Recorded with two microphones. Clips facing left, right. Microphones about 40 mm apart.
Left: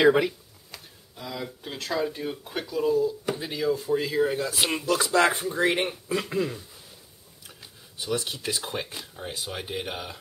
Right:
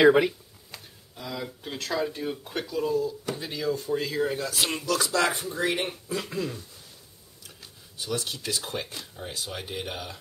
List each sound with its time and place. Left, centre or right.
0.0 s speech: centre
8.0 s speech: centre